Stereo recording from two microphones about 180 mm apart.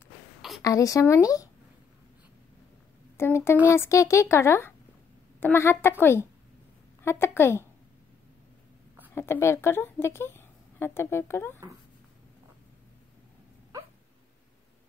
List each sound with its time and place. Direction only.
0.6 s speech: 20° left (ahead or behind)
3.2 s speech: 15° left (ahead or behind)
9.1 s a woman's voice: 15° left (ahead or behind)